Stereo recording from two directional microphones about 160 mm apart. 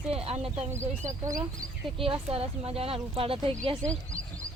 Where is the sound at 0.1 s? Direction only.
40° right (ahead or behind).